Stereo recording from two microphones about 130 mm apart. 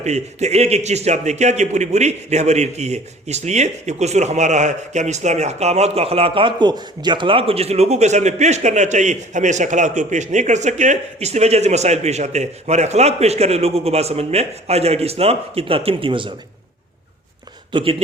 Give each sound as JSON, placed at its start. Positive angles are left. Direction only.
{"t": 0.0, "sound": "a man's voice", "side_deg": -60}
{"t": 17.7, "sound": "speech", "side_deg": -40}